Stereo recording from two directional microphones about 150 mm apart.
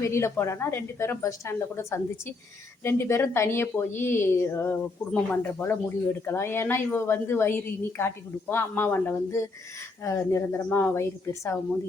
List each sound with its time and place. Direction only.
0.0 s a woman's voice: 20° left (ahead or behind)